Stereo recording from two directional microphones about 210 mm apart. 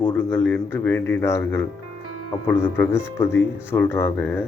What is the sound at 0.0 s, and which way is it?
Speech, 10° left (ahead or behind).